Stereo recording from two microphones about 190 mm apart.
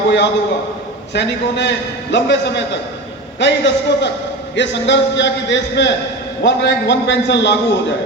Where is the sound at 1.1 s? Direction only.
65° left (ahead or behind).